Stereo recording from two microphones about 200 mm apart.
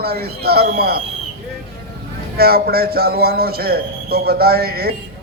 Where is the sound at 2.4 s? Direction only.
50° right (ahead or behind).